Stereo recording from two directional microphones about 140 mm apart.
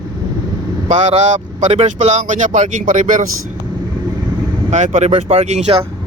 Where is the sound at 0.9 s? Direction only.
50° right (ahead or behind).